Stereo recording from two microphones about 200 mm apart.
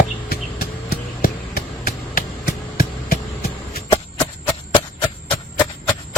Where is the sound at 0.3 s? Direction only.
50° left (ahead or behind).